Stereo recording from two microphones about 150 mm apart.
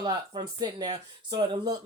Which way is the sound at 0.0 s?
30° right (ahead or behind).